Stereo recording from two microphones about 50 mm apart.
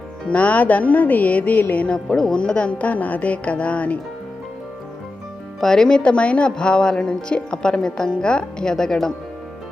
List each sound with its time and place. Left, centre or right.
0.3 s speech: left
2.0 s speech: centre; by 3.9 s left
5.5 s speech: centre